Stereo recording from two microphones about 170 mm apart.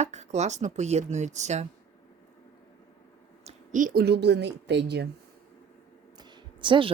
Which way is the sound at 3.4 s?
50° right (ahead or behind).